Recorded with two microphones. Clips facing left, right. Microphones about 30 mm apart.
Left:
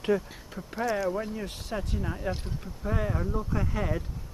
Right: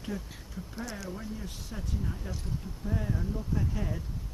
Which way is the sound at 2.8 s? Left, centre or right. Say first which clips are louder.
Left 5 dB; left.